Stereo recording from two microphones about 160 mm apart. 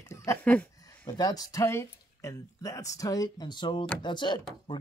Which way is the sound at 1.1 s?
25° left (ahead or behind).